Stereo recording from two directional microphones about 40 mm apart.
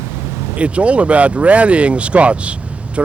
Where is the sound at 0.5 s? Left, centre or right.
Right.